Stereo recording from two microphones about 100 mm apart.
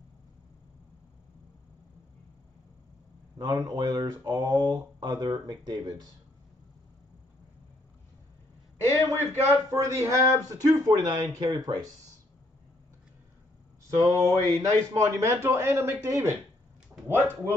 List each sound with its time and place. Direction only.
3.3 s speech: 45° right (ahead or behind)
8.8 s a man's voice: 25° left (ahead or behind)
9.7 s speech: 30° right (ahead or behind)
13.9 s a man's voice: 35° right (ahead or behind)
16.9 s a sound: 15° right (ahead or behind)